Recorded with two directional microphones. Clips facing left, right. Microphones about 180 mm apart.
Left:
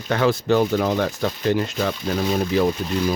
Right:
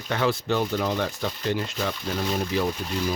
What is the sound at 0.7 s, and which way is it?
Speech, 60° left (ahead or behind).